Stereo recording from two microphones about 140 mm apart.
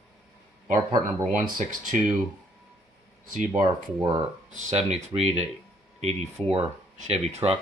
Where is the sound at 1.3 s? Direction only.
65° right (ahead or behind).